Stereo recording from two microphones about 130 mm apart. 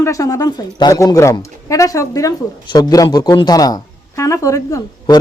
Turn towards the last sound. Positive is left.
turn(degrees=30)  # may be behind; listen again after turning